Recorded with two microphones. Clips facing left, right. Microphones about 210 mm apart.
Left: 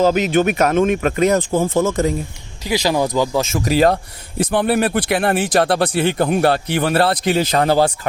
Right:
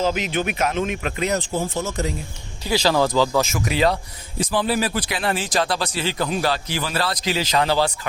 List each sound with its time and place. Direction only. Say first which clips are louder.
0.0 s speech: left 8 dB; 45° left (ahead or behind); by 2.0 s 90° left
2.6 s speech: left 1 dB; 15° left (ahead or behind)
3.6 s speech: left 5 dB; 40° left (ahead or behind)